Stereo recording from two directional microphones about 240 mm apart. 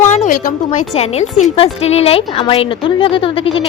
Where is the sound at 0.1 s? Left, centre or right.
Left.